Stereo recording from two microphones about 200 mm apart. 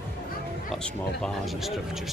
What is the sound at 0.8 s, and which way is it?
Speech, centre (ahead or behind).